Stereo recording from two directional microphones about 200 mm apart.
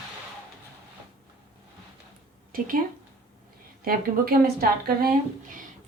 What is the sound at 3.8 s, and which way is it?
Speech, 50° right (ahead or behind).